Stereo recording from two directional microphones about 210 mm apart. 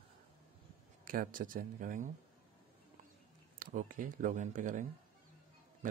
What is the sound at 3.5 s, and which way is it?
Speech, 40° right (ahead or behind).